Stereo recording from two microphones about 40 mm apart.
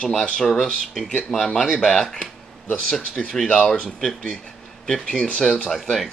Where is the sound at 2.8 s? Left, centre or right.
Centre.